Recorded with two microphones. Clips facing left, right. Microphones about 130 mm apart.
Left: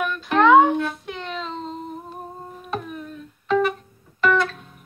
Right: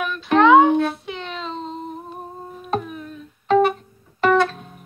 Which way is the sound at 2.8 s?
5° right (ahead or behind).